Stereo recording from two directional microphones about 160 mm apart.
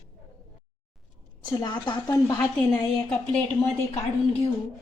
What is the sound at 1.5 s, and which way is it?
Speech, 25° left (ahead or behind).